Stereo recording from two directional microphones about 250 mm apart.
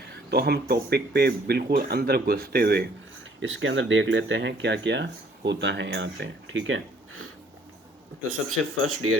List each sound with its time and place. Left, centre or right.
0.3 s speech: right
3.4 s speech: right
8.3 s speech: right